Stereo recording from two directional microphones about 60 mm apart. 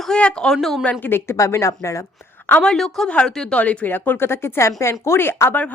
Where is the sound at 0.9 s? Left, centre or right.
Left.